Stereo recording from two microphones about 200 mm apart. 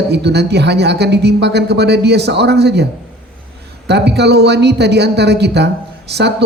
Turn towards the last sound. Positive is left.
turn(degrees=-55)  # may be behind; listen again after turning